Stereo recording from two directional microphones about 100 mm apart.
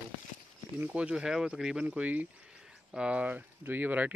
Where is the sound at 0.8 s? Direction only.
15° right (ahead or behind).